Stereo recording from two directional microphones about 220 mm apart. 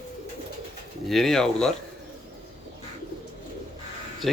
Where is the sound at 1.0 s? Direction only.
Centre (ahead or behind).